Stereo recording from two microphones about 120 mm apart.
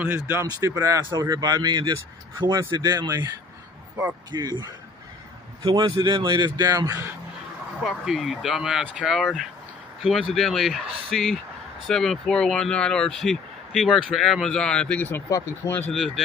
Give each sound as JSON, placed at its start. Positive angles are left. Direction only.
{"t": 0.0, "sound": "speech", "side_deg": -20}
{"t": 0.5, "sound": "speech", "side_deg": -30}
{"t": 4.3, "sound": "speech", "side_deg": -35}
{"t": 7.8, "sound": "speech", "side_deg": 0}